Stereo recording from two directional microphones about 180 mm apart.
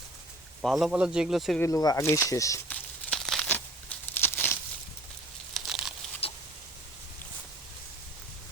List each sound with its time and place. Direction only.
0.6 s speech: centre (ahead or behind)
1.6 s speech: 20° left (ahead or behind)
3.1 s crumpling: 5° left (ahead or behind)
5.5 s crumpling: 5° right (ahead or behind)